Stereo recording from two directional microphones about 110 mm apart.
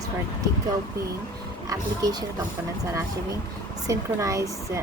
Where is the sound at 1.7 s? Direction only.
35° right (ahead or behind).